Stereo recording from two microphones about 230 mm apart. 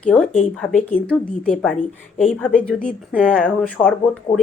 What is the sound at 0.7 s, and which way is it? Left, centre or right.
Speech, left.